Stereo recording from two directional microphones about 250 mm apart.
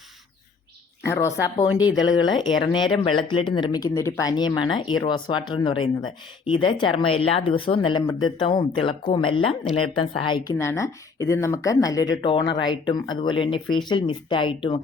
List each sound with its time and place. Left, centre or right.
1.0 s speech: centre